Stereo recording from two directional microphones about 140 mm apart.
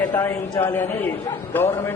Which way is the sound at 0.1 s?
20° left (ahead or behind).